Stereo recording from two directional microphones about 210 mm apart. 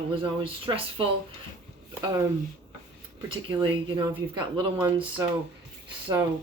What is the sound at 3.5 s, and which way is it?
Speech, 25° right (ahead or behind).